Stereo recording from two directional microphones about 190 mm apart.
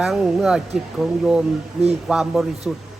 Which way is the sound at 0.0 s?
Centre (ahead or behind).